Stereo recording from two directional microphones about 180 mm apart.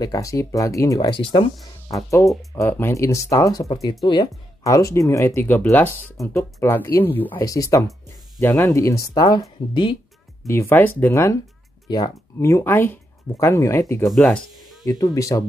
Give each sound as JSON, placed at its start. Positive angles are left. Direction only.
{"t": 0.0, "sound": "speech", "side_deg": 20}
{"t": 1.9, "sound": "speech", "side_deg": 15}
{"t": 10.4, "sound": "speech", "side_deg": 15}
{"t": 14.9, "sound": "speech", "side_deg": 20}